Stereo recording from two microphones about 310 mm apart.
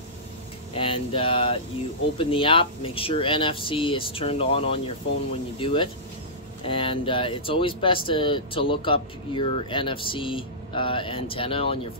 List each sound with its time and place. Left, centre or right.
0.7 s speech: centre